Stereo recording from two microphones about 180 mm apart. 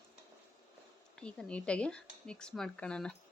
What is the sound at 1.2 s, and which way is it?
Speech, 5° left (ahead or behind).